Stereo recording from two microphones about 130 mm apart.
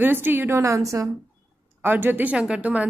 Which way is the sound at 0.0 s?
15° right (ahead or behind).